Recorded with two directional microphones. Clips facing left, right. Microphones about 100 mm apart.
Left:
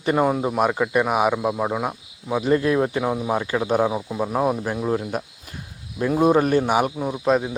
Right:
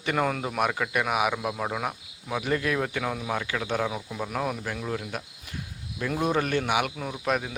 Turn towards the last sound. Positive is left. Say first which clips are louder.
# left 8 dB
turn(degrees=25)  # may be behind; listen again after turning